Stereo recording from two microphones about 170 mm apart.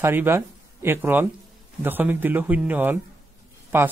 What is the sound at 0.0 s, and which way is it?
A man's voice, 15° right (ahead or behind).